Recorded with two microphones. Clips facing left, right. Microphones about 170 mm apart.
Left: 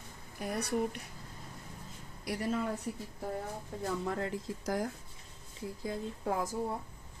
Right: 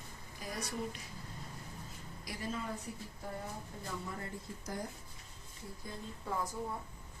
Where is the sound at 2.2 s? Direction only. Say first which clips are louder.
Left 7 dB; 70° left (ahead or behind).